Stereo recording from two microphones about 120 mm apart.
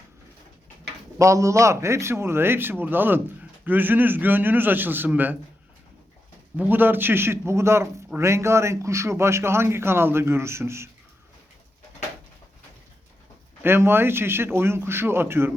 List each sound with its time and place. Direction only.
1.2 s a man's voice: 25° right (ahead or behind)
6.6 s a man's voice: 15° right (ahead or behind)
13.6 s a man's voice: 20° right (ahead or behind)